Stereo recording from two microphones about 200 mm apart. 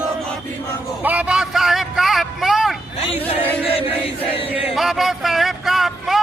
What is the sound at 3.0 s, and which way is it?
Speech, 30° left (ahead or behind).